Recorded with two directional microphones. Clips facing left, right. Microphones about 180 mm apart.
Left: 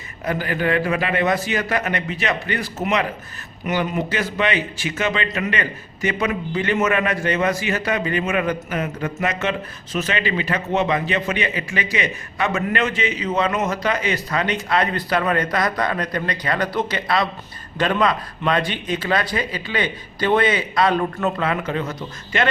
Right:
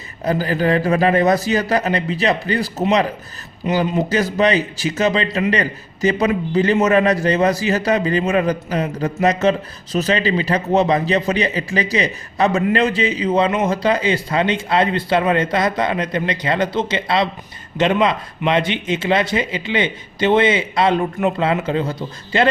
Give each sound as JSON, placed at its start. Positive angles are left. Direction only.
{"t": 0.3, "sound": "a man's voice", "side_deg": -35}